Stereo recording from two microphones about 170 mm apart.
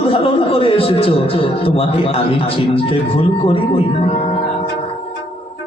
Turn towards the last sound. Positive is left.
turn(degrees=35)  # may be behind; listen again after turning